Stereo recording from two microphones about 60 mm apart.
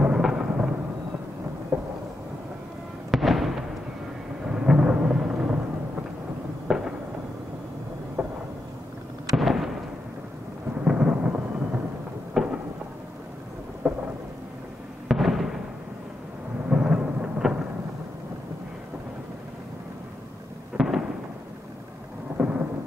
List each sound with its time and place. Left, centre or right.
0.0 s a sound: centre
1.7 s thunder: right
3.1 s fireworks: centre
4.5 s thunder: centre
6.7 s fireworks: centre
8.2 s a sound: right
9.3 s fireworks: centre
11.0 s thunder: centre
12.4 s thunder: centre
13.8 s thunder: centre
15.0 s fireworks: centre
16.6 s thunder: centre
20.7 s fireworks: centre
22.4 s thunder: right